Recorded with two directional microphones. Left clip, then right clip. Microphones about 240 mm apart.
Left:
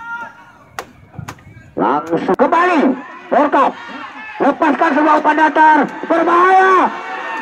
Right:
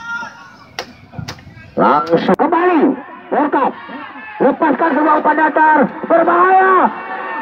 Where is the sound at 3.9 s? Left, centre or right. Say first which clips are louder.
Even; right.